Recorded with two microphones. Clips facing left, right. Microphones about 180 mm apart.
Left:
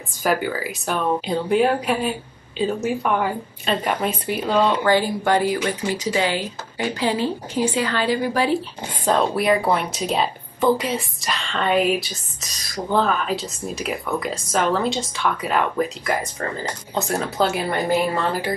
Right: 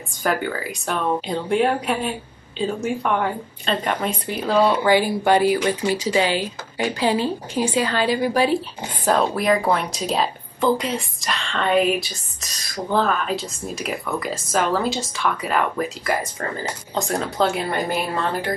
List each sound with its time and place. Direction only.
0.2 s a woman's voice: 5° left (ahead or behind)
4.5 s speech: 10° right (ahead or behind)
9.3 s a woman's voice: 10° left (ahead or behind)
16.9 s speech: 10° left (ahead or behind)